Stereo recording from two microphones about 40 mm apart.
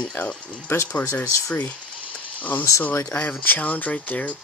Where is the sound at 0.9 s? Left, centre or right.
Left.